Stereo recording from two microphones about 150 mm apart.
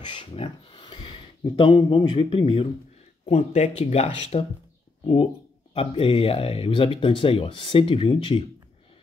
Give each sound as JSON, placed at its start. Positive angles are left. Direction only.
{"t": 0.0, "sound": "a sound", "side_deg": 30}
{"t": 1.6, "sound": "speech", "side_deg": 35}
{"t": 3.3, "sound": "speech", "side_deg": 45}